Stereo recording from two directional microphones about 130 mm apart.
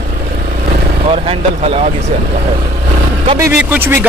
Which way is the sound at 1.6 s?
50° right (ahead or behind).